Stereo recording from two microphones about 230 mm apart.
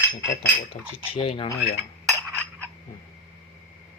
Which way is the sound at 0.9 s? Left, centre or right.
Left.